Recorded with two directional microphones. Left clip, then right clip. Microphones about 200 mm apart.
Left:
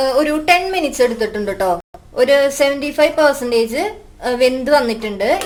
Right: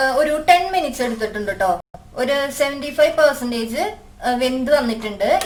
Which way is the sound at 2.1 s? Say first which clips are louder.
Left 7 dB; 35° left (ahead or behind).